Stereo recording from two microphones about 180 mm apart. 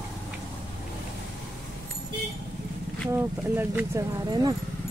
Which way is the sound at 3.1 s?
10° right (ahead or behind).